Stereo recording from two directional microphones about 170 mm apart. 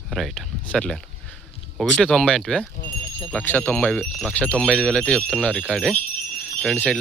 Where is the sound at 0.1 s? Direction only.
Centre (ahead or behind).